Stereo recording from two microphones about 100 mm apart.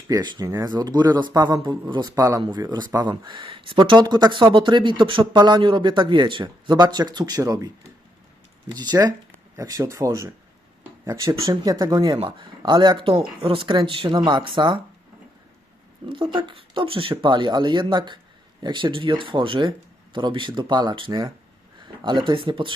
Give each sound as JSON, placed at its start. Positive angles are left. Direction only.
{"t": 0.1, "sound": "speech", "side_deg": -45}
{"t": 2.1, "sound": "speech", "side_deg": -30}
{"t": 2.4, "sound": "speech", "side_deg": -45}
{"t": 8.7, "sound": "speech", "side_deg": -45}
{"t": 16.0, "sound": "speech", "side_deg": -55}